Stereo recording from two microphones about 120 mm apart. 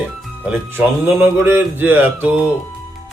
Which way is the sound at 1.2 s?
15° right (ahead or behind).